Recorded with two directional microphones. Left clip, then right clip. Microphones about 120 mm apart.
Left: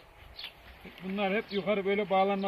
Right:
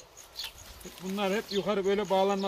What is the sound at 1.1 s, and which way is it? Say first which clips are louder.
Speech: right 1 dB; 45° right (ahead or behind).